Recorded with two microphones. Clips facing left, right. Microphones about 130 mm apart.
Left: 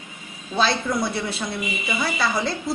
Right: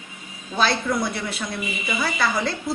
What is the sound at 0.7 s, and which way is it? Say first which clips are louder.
A woman's voice: even; centre (ahead or behind).